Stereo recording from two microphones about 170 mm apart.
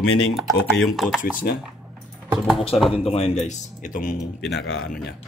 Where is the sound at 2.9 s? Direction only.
35° left (ahead or behind).